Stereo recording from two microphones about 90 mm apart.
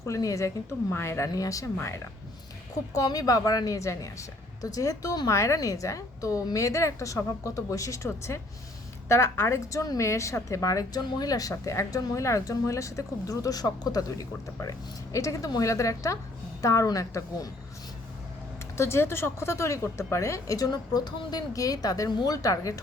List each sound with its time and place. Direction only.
0.0 s a woman's voice: 35° left (ahead or behind)
0.9 s speech: 25° left (ahead or behind)
1.3 s a woman's voice: 40° left (ahead or behind)
18.8 s a woman's voice: 30° left (ahead or behind)